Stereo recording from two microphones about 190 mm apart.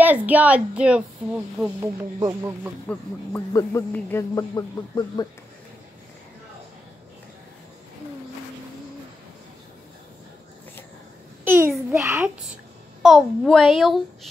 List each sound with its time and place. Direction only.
0.0 s speech: 10° right (ahead or behind)
2.9 s a man's voice: 15° left (ahead or behind)
11.4 s a sound: 10° right (ahead or behind)
13.0 s a child's voice: centre (ahead or behind)